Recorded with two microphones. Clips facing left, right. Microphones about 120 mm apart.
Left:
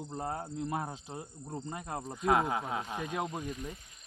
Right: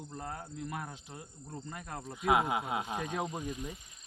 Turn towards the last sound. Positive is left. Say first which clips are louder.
# even
turn(degrees=-5)  # may be behind; listen again after turning